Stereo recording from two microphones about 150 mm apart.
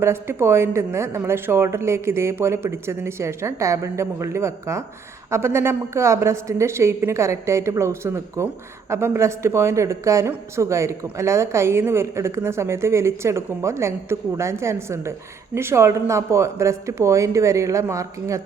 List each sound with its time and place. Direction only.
0.0 s speech: 15° right (ahead or behind)